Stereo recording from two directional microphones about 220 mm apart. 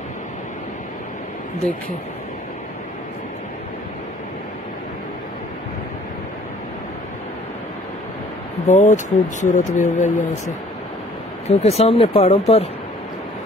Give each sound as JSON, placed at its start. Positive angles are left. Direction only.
{"t": 8.6, "sound": "speech", "side_deg": 35}